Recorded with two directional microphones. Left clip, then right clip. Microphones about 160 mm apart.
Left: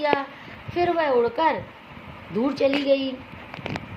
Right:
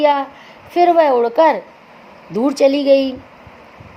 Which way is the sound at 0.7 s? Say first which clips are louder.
Right 10 dB; 90° right.